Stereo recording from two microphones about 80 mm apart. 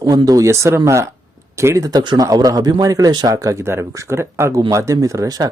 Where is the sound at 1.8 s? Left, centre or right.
Right.